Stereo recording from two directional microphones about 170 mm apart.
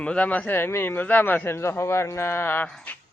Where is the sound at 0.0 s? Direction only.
10° left (ahead or behind).